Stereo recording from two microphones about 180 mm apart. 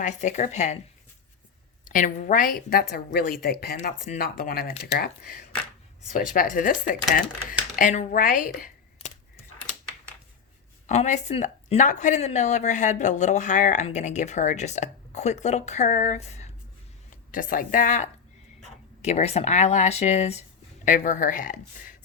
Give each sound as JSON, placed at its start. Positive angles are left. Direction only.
{"t": 0.0, "sound": "speech", "side_deg": 40}
{"t": 1.8, "sound": "speech", "side_deg": 45}
{"t": 10.8, "sound": "speech", "side_deg": 40}
{"t": 17.3, "sound": "speech", "side_deg": 50}